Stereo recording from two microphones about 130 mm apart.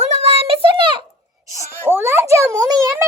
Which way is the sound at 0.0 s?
55° right (ahead or behind).